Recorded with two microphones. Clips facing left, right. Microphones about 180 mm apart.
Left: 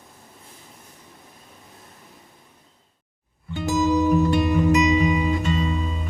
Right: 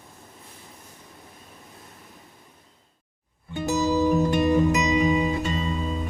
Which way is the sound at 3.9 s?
35° right (ahead or behind).